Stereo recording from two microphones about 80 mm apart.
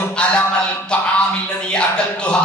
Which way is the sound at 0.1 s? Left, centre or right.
Centre.